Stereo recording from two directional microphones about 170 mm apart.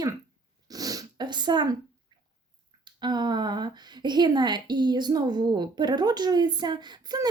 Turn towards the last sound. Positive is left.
turn(degrees=-25)  # may be behind; listen again after turning